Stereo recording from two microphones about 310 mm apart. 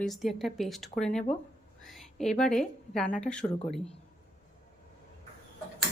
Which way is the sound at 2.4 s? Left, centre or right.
Centre.